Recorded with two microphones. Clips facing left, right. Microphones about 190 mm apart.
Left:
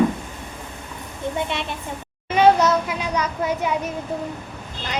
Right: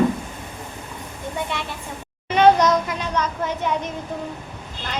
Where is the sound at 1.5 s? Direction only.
20° left (ahead or behind).